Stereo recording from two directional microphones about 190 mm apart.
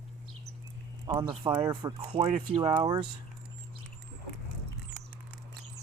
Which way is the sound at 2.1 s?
35° right (ahead or behind).